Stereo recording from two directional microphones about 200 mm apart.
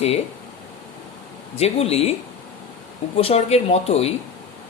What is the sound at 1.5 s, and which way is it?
Speech, 30° left (ahead or behind).